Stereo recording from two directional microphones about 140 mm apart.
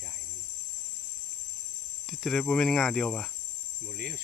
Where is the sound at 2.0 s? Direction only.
Centre (ahead or behind).